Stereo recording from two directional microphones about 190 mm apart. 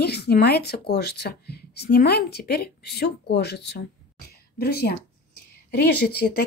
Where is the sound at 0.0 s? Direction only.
60° left (ahead or behind).